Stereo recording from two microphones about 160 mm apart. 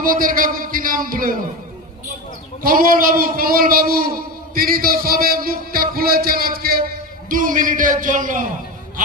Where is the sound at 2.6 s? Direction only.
60° right (ahead or behind).